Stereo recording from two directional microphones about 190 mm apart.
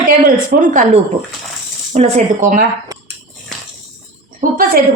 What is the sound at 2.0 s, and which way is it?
Speech, 40° right (ahead or behind).